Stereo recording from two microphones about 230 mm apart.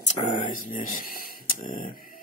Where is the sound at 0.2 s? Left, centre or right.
Left.